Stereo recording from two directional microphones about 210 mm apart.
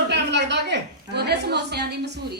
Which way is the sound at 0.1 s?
55° right (ahead or behind).